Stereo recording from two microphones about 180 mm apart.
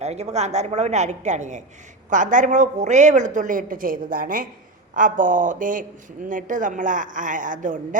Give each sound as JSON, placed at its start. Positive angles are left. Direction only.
{"t": 0.0, "sound": "a woman's voice", "side_deg": -40}